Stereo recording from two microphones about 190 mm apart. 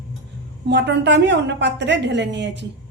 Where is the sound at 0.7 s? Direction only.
65° right (ahead or behind).